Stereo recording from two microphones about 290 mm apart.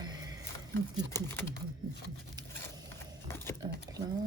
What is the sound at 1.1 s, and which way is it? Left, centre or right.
Speech, centre.